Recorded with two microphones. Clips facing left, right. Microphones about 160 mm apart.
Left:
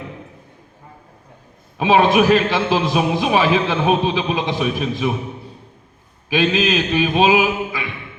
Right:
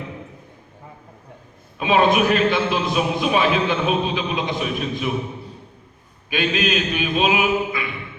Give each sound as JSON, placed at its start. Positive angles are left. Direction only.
{"t": 1.8, "sound": "a man's voice", "side_deg": 90}
{"t": 6.3, "sound": "a man's voice", "side_deg": 90}